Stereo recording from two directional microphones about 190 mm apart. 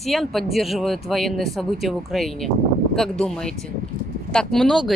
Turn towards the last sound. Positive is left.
turn(degrees=0)  # may be behind; listen again after turning